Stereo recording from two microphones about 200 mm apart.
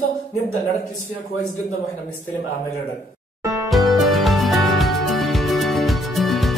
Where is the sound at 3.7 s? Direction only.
Centre (ahead or behind).